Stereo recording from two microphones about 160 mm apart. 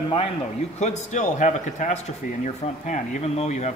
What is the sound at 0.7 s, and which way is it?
Speech, 45° left (ahead or behind).